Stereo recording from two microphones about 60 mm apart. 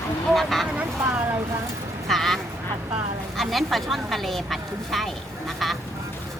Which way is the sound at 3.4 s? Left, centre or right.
Centre.